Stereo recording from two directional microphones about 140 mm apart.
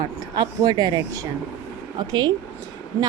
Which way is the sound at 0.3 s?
30° right (ahead or behind).